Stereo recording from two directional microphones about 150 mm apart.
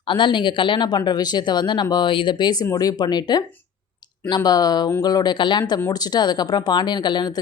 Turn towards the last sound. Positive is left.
turn(degrees=30)  # may be behind; listen again after turning